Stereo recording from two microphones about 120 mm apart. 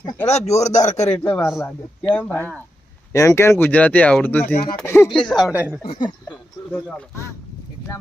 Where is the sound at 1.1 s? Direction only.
10° left (ahead or behind).